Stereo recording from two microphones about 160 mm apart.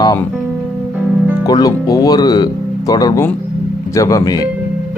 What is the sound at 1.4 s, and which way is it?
Speech, 25° left (ahead or behind).